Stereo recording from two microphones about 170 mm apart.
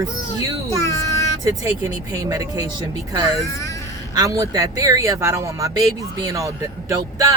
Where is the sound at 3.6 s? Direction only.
20° left (ahead or behind).